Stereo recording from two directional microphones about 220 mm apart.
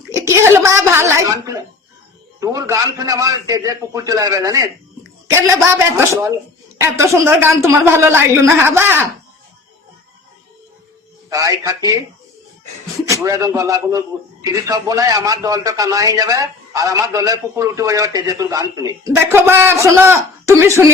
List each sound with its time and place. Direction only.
0.1 s a sound: 10° right (ahead or behind)
2.4 s a man's voice: 15° right (ahead or behind)
11.3 s a man's voice: 15° right (ahead or behind)
13.2 s a man's voice: 15° right (ahead or behind)